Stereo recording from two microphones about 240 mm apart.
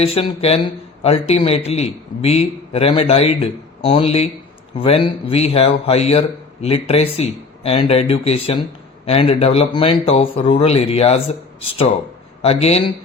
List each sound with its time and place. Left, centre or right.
0.0 s speech: left